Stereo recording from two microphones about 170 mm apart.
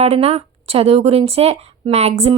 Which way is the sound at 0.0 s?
35° right (ahead or behind).